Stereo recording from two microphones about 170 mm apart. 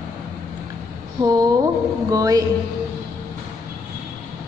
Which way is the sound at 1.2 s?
20° right (ahead or behind).